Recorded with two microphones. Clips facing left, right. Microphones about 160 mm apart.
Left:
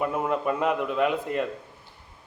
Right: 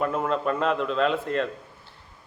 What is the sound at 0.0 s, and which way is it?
A man's voice, 15° left (ahead or behind).